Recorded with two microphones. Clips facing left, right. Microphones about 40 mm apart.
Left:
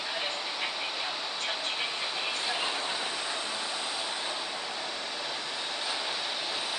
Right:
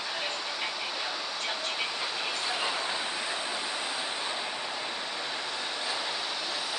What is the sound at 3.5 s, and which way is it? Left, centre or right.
Vehicle, right.